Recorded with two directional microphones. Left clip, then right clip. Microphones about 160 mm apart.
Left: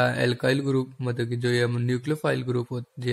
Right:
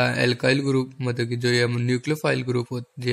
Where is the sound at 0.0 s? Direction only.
20° right (ahead or behind).